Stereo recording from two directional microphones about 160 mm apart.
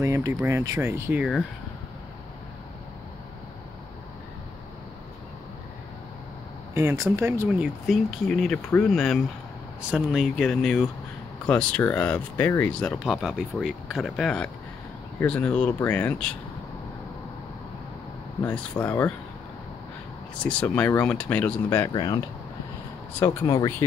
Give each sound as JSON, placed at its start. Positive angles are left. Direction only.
{"t": 0.0, "sound": "speech", "side_deg": -15}
{"t": 6.7, "sound": "speech", "side_deg": -15}
{"t": 18.4, "sound": "speech", "side_deg": 10}
{"t": 20.4, "sound": "speech", "side_deg": 10}